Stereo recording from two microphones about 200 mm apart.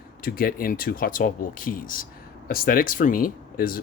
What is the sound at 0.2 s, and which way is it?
Speech, 45° left (ahead or behind).